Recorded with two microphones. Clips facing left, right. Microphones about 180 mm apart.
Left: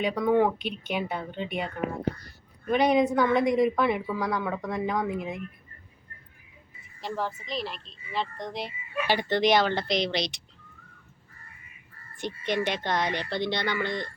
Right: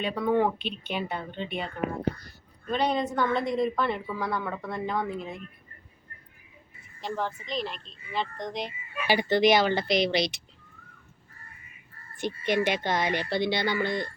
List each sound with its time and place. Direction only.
0.3 s speech: 10° left (ahead or behind)
7.0 s speech: centre (ahead or behind)
12.2 s speech: 5° right (ahead or behind)